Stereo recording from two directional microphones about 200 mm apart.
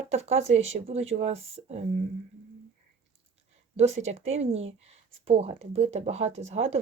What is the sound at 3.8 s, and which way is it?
Speech, 35° right (ahead or behind).